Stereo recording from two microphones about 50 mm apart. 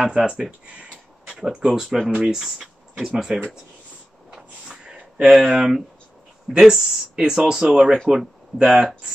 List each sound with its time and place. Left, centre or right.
0.0 s speech: centre
1.4 s speech: centre
2.0 s speech: right
2.3 s speech: centre
4.3 s a sound: centre
5.4 s speech: centre